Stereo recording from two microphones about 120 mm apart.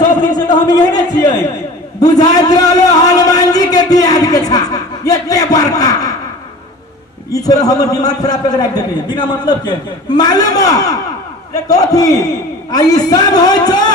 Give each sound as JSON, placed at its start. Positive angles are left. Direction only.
{"t": 0.2, "sound": "a man's voice", "side_deg": 35}
{"t": 7.3, "sound": "a man's voice", "side_deg": 30}